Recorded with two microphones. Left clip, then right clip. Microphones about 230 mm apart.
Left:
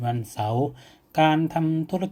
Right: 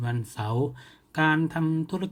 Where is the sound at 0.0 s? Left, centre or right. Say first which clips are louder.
Left 7 dB; centre.